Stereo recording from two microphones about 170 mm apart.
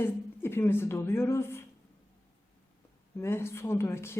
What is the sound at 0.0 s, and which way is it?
Speech, 15° left (ahead or behind).